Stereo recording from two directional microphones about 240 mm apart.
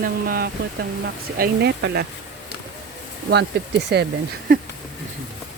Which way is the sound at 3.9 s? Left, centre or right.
Right.